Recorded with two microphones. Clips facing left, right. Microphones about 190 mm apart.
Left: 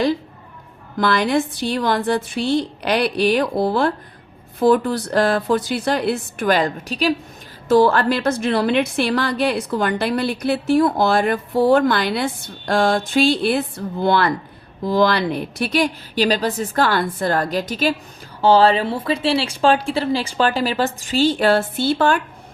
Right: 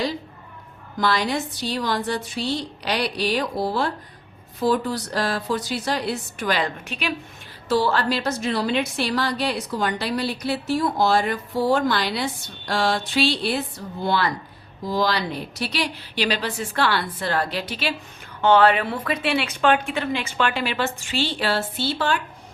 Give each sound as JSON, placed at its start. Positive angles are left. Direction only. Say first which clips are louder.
{"t": 0.9, "sound": "a woman's voice", "louder": "left 5 dB", "side_deg": 55}
{"t": 7.7, "sound": "a woman's voice", "louder": "left 6 dB", "side_deg": 50}
{"t": 18.4, "sound": "a woman's voice", "louder": "left 3 dB", "side_deg": 30}